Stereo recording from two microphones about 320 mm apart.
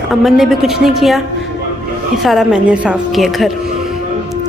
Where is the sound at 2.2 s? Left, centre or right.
Centre.